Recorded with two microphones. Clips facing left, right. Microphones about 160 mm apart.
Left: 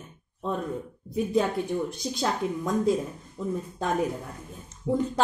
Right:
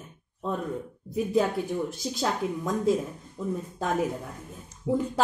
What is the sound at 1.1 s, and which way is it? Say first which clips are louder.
Speech: even; centre (ahead or behind).